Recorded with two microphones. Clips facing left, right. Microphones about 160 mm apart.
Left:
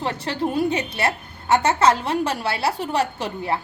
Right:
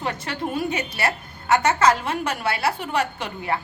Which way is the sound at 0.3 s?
30° left (ahead or behind).